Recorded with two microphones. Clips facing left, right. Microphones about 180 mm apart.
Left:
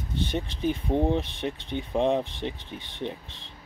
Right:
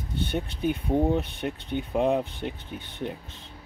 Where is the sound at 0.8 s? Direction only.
5° right (ahead or behind).